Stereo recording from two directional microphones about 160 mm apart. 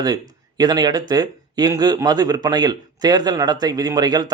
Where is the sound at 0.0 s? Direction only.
25° right (ahead or behind).